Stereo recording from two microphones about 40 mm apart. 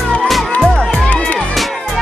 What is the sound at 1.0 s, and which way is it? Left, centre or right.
Music, left.